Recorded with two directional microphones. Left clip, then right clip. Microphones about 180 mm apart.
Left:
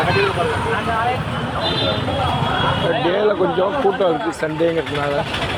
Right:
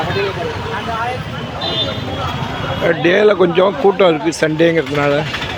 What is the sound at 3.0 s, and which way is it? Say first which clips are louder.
Speech: right 8 dB; 40° right (ahead or behind).